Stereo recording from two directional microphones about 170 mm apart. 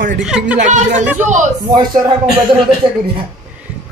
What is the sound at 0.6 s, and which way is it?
Speech, 45° right (ahead or behind).